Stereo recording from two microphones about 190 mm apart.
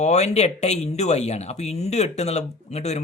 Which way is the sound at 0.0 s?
35° left (ahead or behind).